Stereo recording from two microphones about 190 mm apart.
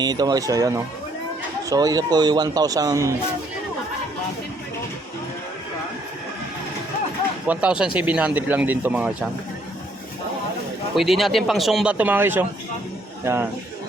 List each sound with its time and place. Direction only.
0.0 s speech: 20° right (ahead or behind)
7.4 s speech: 5° right (ahead or behind)
10.9 s a man's voice: centre (ahead or behind)